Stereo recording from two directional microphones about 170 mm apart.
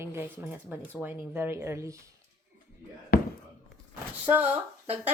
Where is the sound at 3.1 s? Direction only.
60° left (ahead or behind).